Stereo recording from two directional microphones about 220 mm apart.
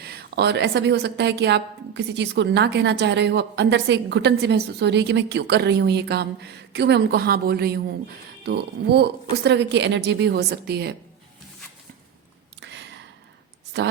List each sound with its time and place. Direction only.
0.0 s a woman's voice: 45° right (ahead or behind)
12.5 s a sound: 55° right (ahead or behind)
13.7 s a woman's voice: 55° right (ahead or behind)